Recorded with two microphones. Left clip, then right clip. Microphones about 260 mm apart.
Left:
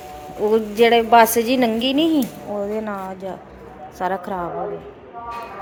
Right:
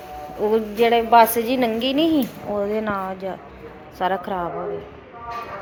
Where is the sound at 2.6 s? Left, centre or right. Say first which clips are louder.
Right 2 dB; centre.